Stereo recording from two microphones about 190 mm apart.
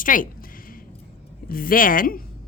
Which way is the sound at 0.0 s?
45° left (ahead or behind).